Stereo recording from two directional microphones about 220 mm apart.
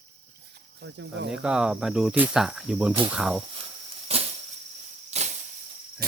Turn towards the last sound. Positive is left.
turn(degrees=-30)  # may be behind; listen again after turning